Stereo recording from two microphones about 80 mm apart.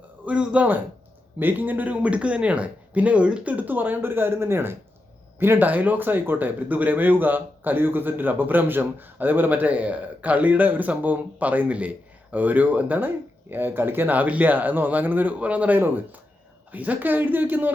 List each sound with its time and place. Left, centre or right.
0.3 s speech: centre